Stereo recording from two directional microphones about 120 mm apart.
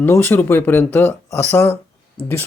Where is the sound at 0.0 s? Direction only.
15° left (ahead or behind).